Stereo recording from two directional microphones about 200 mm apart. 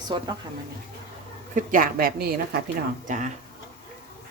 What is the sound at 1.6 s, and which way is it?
A woman's voice, 45° right (ahead or behind).